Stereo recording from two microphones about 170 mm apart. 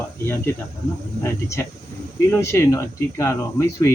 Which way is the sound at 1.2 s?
15° left (ahead or behind).